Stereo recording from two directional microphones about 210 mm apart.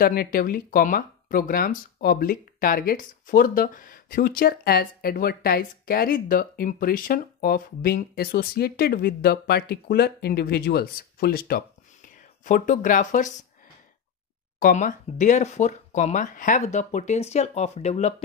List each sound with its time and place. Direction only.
0.0 s speech: 45° left (ahead or behind)
14.6 s speech: 40° left (ahead or behind)